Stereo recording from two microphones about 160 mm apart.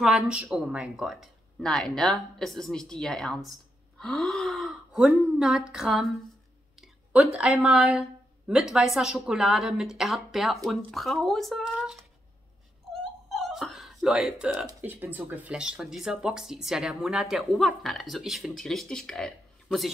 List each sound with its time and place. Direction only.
0.3 s speech: 5° right (ahead or behind)
6.8 s a sound: 10° right (ahead or behind)
7.3 s speech: 5° right (ahead or behind)
13.0 s whimper: centre (ahead or behind)
14.8 s speech: 10° right (ahead or behind)